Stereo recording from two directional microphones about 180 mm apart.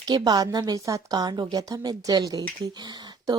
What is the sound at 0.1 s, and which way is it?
A woman's voice, 20° right (ahead or behind).